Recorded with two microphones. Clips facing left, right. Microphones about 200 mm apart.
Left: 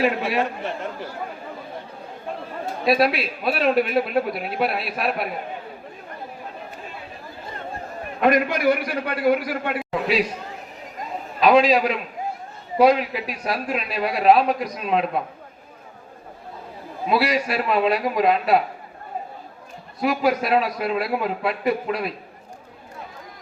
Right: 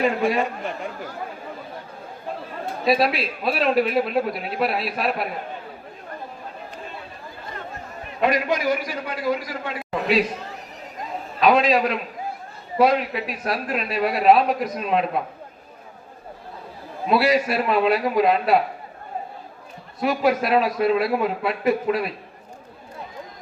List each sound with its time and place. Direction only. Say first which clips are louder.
0.0 s a man's voice: right 1 dB; centre (ahead or behind)
2.8 s a man's voice: left 1 dB; centre (ahead or behind)
8.2 s a man's voice: left 2 dB; 55° left (ahead or behind)
11.3 s a man's voice: left 2 dB; centre (ahead or behind)
17.1 s a man's voice: right 2 dB; centre (ahead or behind)
20.0 s a man's voice: even; centre (ahead or behind)